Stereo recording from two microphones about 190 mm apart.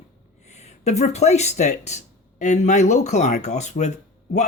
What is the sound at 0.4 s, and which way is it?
Speech, 35° left (ahead or behind).